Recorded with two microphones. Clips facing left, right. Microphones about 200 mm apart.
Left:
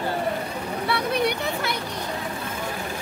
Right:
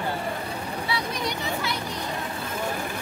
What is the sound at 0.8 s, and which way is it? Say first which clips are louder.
Vehicle: left 8 dB; 60° left (ahead or behind).